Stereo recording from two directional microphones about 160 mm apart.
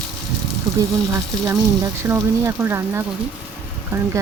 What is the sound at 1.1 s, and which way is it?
Speech, 20° right (ahead or behind).